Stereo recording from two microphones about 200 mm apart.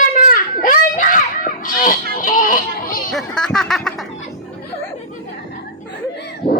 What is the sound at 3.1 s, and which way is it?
Music, 5° left (ahead or behind).